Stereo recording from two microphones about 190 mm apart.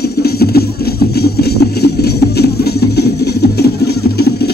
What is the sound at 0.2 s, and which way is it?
Music, 55° left (ahead or behind).